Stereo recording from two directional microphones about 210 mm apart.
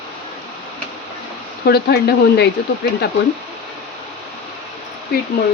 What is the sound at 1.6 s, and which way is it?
Speech, 50° left (ahead or behind).